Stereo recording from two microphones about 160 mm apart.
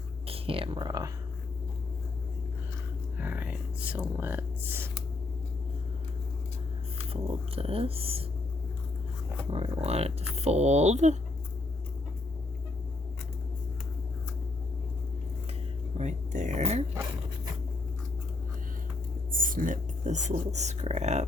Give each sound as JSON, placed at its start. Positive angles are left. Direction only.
{"t": 0.3, "sound": "speech", "side_deg": -35}
{"t": 3.2, "sound": "speech", "side_deg": -10}
{"t": 7.1, "sound": "speech", "side_deg": -35}
{"t": 9.5, "sound": "speech", "side_deg": -40}
{"t": 16.0, "sound": "a sound", "side_deg": -50}
{"t": 19.3, "sound": "speech", "side_deg": -60}